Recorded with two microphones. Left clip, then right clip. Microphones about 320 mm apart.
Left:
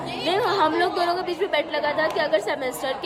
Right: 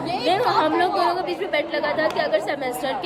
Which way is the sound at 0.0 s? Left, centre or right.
Centre.